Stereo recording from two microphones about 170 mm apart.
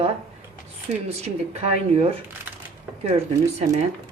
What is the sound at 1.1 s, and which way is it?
Speech, 40° right (ahead or behind).